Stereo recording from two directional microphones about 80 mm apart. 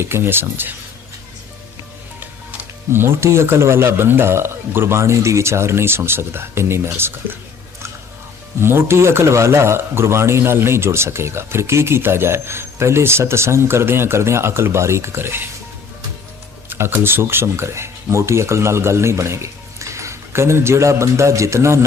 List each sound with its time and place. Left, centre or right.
0.0 s speech: right
2.9 s speech: right
8.6 s speech: right
16.6 s speech: right